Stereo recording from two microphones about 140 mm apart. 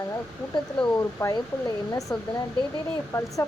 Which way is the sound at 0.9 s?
25° left (ahead or behind).